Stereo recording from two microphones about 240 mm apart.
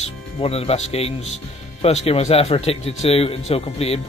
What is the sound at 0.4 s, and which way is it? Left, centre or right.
Speech, left.